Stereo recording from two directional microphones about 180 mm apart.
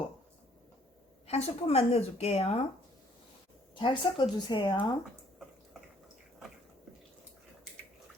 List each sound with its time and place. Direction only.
1.3 s speech: 35° left (ahead or behind)
3.8 s speech: 25° left (ahead or behind)